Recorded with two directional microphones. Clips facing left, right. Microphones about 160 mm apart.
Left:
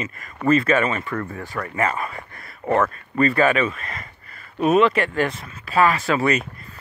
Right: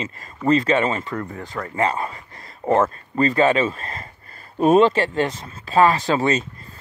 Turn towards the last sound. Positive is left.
turn(degrees=-25)  # may be behind; listen again after turning